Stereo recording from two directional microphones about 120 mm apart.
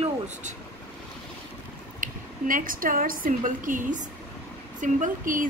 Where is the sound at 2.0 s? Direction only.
90° right.